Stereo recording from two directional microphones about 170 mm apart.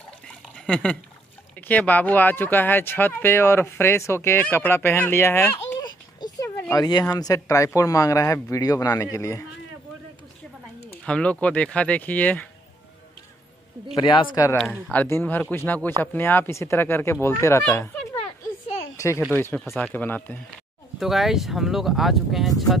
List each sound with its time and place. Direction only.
0.7 s speech: 5° left (ahead or behind)
5.8 s a sound: 25° left (ahead or behind)
6.8 s speech: 25° left (ahead or behind)
11.1 s speech: 5° left (ahead or behind)
13.9 s speech: 30° left (ahead or behind)
14.6 s speech: 10° left (ahead or behind)
18.9 s speech: 15° left (ahead or behind)
21.0 s speech: centre (ahead or behind)